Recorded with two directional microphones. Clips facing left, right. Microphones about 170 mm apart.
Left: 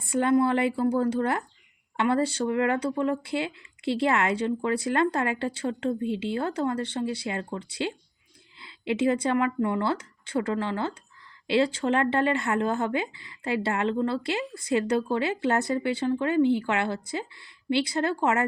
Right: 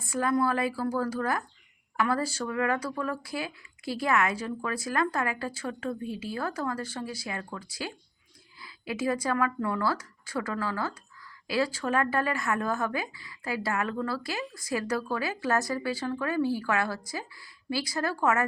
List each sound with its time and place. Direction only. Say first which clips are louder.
0.0 s speech: left 4 dB; 30° left (ahead or behind)